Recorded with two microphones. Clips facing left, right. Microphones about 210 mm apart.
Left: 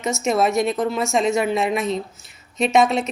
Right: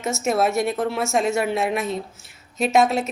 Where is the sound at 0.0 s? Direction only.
5° right (ahead or behind).